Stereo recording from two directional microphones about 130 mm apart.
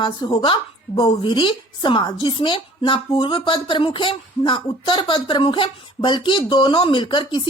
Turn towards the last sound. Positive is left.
turn(degrees=35)  # may be behind; listen again after turning